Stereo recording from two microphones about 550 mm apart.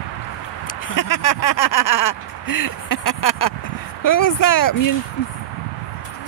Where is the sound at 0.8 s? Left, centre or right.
Left.